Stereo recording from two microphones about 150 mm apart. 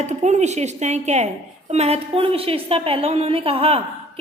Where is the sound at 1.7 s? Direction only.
45° right (ahead or behind).